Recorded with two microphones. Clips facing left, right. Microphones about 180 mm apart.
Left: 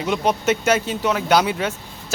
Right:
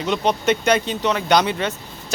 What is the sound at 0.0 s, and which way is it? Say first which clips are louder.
Speech: even; 10° left (ahead or behind).